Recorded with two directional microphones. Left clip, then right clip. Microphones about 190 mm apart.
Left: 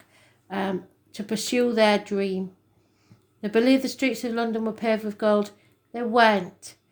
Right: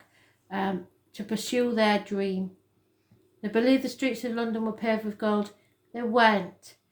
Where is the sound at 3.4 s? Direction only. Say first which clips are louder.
Left 3 dB; 45° left (ahead or behind).